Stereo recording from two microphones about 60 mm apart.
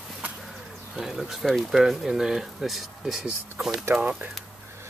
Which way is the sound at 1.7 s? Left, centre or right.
Centre.